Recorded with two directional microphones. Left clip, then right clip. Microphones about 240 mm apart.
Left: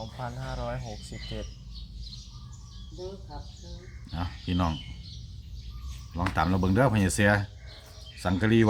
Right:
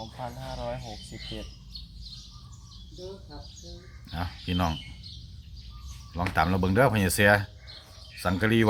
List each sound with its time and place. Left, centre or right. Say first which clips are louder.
0.0 s speech: even; left
4.1 s speech: right 1 dB; centre
6.1 s speech: right 2 dB; centre